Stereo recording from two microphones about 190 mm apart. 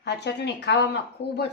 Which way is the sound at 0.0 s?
65° left (ahead or behind).